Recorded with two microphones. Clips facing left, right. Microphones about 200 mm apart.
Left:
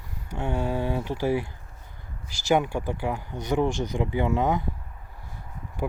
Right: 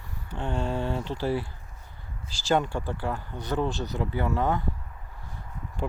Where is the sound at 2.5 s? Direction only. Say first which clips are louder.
Left 2 dB; 10° left (ahead or behind).